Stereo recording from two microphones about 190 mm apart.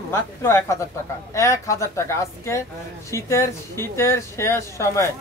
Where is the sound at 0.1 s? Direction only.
15° left (ahead or behind).